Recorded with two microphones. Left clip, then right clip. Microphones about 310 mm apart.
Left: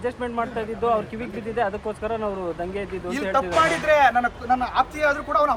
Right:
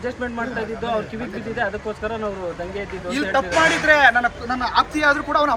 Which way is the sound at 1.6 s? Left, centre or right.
Left.